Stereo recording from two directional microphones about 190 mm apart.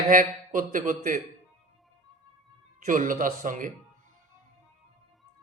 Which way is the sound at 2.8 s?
45° right (ahead or behind).